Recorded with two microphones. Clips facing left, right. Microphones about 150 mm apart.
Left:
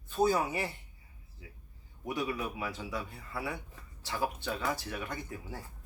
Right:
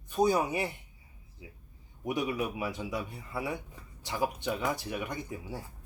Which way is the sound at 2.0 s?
20° right (ahead or behind).